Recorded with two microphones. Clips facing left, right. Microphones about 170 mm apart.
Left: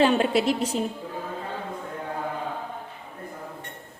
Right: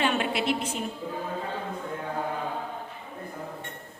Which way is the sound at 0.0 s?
35° left (ahead or behind).